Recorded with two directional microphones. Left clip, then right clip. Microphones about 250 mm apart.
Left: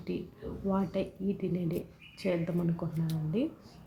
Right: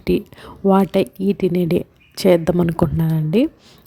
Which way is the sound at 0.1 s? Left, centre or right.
Right.